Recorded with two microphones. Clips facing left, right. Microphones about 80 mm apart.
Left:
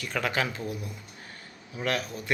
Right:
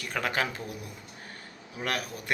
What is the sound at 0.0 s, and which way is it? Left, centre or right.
Speech, right.